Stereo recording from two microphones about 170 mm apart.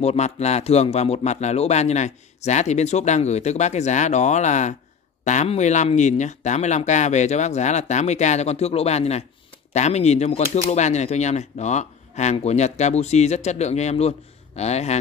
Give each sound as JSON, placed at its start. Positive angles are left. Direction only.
{"t": 0.0, "sound": "speech", "side_deg": 40}